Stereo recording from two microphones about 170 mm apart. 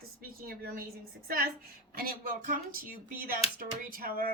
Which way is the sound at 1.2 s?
60° right (ahead or behind).